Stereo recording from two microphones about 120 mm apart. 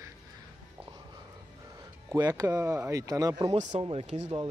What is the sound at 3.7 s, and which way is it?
Speech, 45° right (ahead or behind).